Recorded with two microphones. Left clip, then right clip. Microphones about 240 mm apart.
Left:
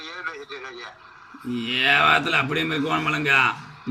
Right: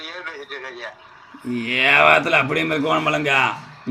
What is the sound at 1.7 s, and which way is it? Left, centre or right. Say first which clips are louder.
A man's voice: right 4 dB; left.